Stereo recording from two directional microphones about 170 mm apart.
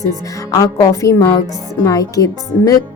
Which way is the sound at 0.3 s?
20° left (ahead or behind).